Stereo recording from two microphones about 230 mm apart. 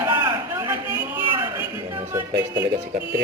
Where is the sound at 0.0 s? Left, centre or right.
Centre.